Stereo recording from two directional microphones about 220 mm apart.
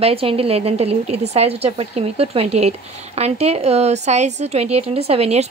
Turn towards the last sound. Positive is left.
turn(degrees=-30)  # may be behind; listen again after turning